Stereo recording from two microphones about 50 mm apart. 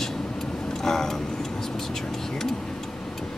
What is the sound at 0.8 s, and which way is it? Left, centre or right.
Music, centre.